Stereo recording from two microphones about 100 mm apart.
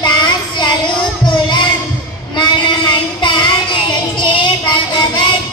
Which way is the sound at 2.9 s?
50° left (ahead or behind).